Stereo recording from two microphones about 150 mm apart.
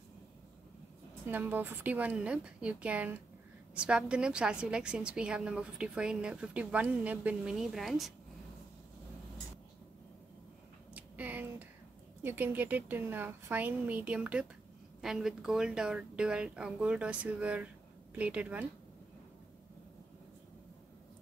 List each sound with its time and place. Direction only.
1.3 s a woman's voice: 15° right (ahead or behind)
11.0 s a sound: 10° right (ahead or behind)
12.2 s a woman's voice: 15° right (ahead or behind)